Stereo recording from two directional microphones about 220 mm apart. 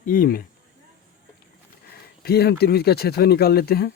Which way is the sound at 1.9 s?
45° left (ahead or behind).